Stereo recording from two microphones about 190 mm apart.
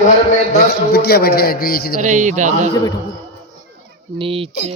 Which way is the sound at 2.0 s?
40° right (ahead or behind).